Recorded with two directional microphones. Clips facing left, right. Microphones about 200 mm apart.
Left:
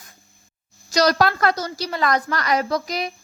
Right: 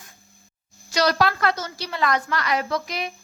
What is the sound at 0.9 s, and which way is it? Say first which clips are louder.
A woman's voice: left 3 dB; 40° left (ahead or behind).